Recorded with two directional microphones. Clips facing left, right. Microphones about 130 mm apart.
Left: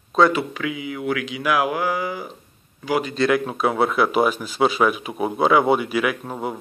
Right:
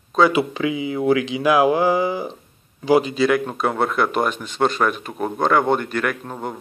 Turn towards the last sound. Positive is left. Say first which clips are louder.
# left 1 dB
turn(degrees=5)  # may be behind; listen again after turning